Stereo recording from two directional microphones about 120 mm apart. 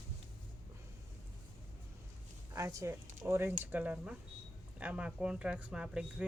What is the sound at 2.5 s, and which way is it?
A woman's voice, 25° right (ahead or behind).